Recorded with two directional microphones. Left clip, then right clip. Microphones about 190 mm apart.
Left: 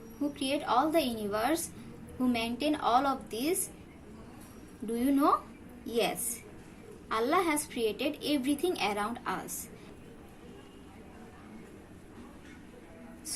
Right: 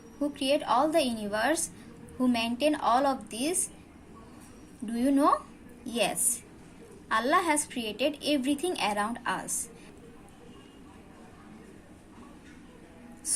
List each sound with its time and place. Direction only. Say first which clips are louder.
0.3 s a woman's voice: right 3 dB; 30° right (ahead or behind)
4.9 s a woman's voice: right 2 dB; 30° right (ahead or behind)
7.2 s a woman's voice: right 3 dB; 35° right (ahead or behind)